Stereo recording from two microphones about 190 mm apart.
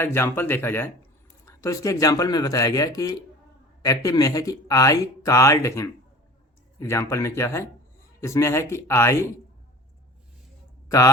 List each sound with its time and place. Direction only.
0.0 s speech: 10° left (ahead or behind)
10.8 s a man's voice: 15° left (ahead or behind)